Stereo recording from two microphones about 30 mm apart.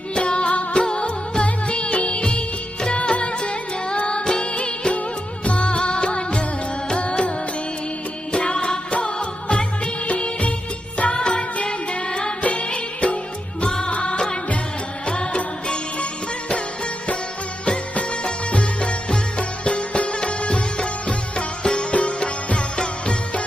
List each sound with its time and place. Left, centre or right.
0.1 s music: left
1.5 s music of bollywood: left
2.8 s music: left
4.6 s music of bollywood: left
5.5 s music of bollywood: left
6.9 s music: left
10.1 s music of bollywood: left
11.5 s music: left
13.7 s music: left
18.5 s music: left
21.9 s music: left